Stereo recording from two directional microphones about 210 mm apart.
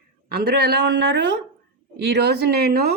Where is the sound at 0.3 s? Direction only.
50° right (ahead or behind).